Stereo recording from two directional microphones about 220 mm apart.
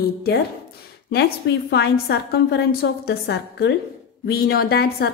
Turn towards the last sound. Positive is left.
turn(degrees=45)  # may be behind; listen again after turning